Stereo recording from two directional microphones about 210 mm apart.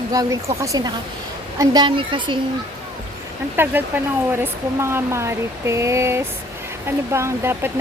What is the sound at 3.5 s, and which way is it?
Speech, 10° right (ahead or behind).